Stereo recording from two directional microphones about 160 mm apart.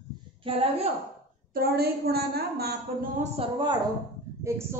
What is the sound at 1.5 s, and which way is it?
A woman's voice, 75° right (ahead or behind).